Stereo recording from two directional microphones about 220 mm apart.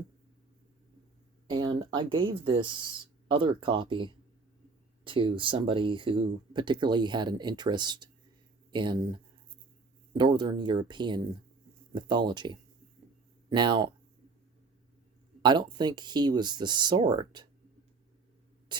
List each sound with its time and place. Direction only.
1.5 s speech: 20° right (ahead or behind)
15.4 s speech: 20° right (ahead or behind)